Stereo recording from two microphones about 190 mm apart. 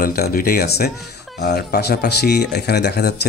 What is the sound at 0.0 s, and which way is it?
Speech, 50° left (ahead or behind).